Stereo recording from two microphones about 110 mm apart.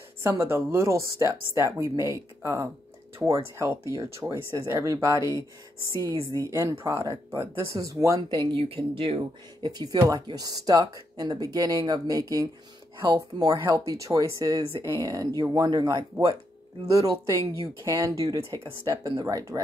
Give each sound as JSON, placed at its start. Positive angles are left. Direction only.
{"t": 0.2, "sound": "speech", "side_deg": -20}
{"t": 3.8, "sound": "speech", "side_deg": -30}
{"t": 6.6, "sound": "speech", "side_deg": -25}
{"t": 8.3, "sound": "speech", "side_deg": -50}
{"t": 9.7, "sound": "speech", "side_deg": -40}